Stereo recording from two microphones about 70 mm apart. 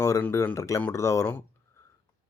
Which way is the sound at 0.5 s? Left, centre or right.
Left.